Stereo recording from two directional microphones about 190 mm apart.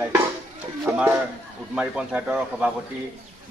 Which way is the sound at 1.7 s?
5° right (ahead or behind).